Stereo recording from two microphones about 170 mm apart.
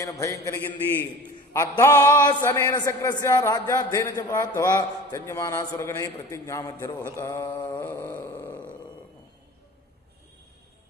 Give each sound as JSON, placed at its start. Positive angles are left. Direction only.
{"t": 0.0, "sound": "a man's voice", "side_deg": 20}
{"t": 1.6, "sound": "a man's voice", "side_deg": 20}
{"t": 6.5, "sound": "mantra", "side_deg": 20}
{"t": 7.9, "sound": "a sound", "side_deg": 10}